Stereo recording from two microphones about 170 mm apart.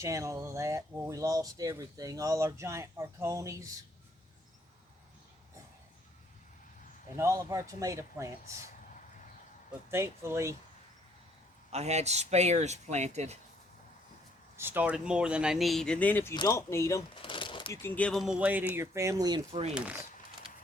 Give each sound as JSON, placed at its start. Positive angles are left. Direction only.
{"t": 0.0, "sound": "speech", "side_deg": -20}
{"t": 7.2, "sound": "speech", "side_deg": -20}
{"t": 9.9, "sound": "speech", "side_deg": -15}
{"t": 11.7, "sound": "speech", "side_deg": -40}
{"t": 14.5, "sound": "speech", "side_deg": -10}
{"t": 16.3, "sound": "speech", "side_deg": 25}
{"t": 17.2, "sound": "shuffling cards", "side_deg": 30}
{"t": 17.7, "sound": "speech", "side_deg": 10}